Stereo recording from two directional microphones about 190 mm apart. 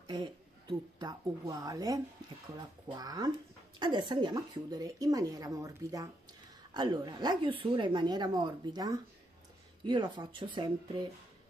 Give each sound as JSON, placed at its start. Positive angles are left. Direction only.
{"t": 0.0, "sound": "a woman's voice", "side_deg": -25}